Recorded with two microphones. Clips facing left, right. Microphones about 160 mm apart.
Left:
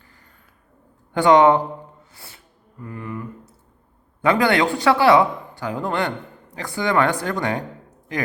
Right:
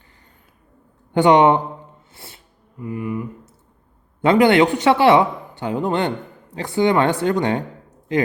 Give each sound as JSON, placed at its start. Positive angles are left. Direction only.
{"t": 1.1, "sound": "speech", "side_deg": -20}
{"t": 2.7, "sound": "speech", "side_deg": -15}
{"t": 4.2, "sound": "speech", "side_deg": -25}